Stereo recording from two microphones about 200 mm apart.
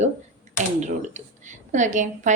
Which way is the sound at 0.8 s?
35° right (ahead or behind).